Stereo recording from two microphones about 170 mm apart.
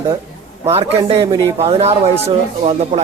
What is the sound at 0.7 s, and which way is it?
A man's voice, 35° right (ahead or behind).